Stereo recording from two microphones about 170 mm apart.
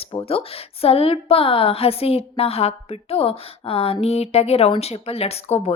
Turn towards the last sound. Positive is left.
turn(degrees=40)  # may be behind; listen again after turning